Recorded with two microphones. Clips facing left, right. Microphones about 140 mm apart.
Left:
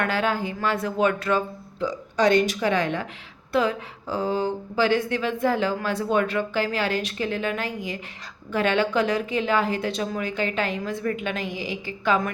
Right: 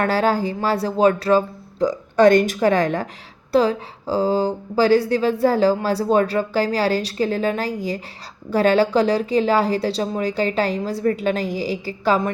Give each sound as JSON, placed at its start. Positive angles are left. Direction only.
{"t": 0.0, "sound": "a woman's voice", "side_deg": -35}